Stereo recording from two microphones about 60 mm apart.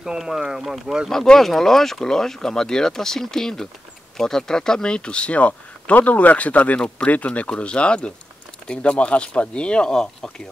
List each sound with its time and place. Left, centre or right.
0.0 s speech: centre